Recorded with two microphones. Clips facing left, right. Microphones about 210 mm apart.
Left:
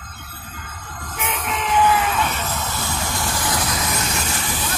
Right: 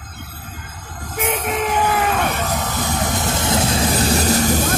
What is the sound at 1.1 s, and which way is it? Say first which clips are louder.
Music: right 6 dB; 45° right (ahead or behind).